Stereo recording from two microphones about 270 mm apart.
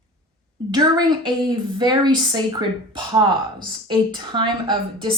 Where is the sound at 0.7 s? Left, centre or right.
Centre.